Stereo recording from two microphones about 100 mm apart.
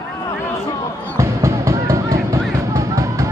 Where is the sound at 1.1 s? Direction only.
35° right (ahead or behind).